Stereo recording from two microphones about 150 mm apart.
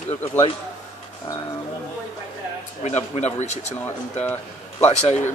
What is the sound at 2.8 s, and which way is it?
Speech, 50° left (ahead or behind).